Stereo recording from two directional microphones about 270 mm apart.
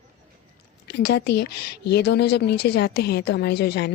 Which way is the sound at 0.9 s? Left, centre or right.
Left.